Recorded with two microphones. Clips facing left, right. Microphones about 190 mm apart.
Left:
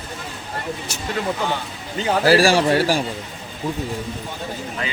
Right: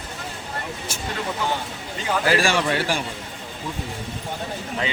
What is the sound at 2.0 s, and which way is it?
Speech, 35° left (ahead or behind).